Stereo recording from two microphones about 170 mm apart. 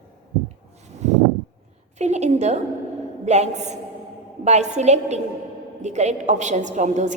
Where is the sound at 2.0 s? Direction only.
40° right (ahead or behind).